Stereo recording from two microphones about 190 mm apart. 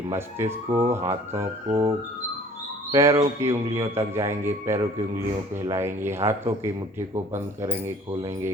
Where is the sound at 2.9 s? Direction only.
15° right (ahead or behind).